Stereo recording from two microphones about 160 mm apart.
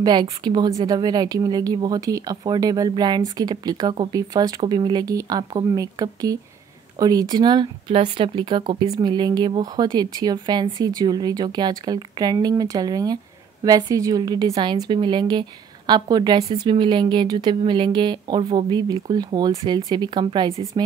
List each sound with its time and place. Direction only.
0.0 s a woman's voice: 25° right (ahead or behind)